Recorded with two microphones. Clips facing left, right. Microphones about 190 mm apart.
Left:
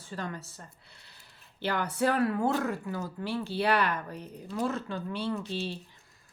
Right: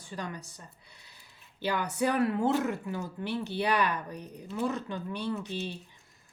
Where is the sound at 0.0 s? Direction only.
15° right (ahead or behind).